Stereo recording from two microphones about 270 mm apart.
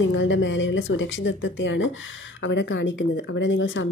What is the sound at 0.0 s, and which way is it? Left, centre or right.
Speech, left.